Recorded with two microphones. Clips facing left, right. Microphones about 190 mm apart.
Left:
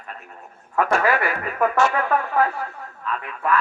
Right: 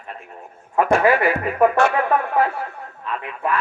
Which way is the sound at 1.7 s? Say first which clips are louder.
Right 2 dB; 60° right (ahead or behind).